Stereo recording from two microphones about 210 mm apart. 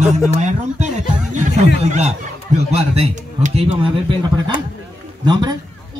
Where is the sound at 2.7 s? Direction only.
30° right (ahead or behind).